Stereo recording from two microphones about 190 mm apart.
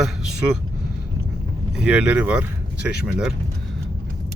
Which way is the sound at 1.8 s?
5° right (ahead or behind).